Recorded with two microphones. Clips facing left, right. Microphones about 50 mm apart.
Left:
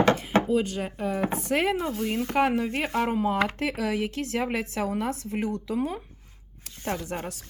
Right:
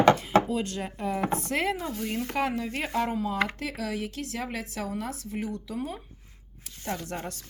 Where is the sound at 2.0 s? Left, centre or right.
Centre.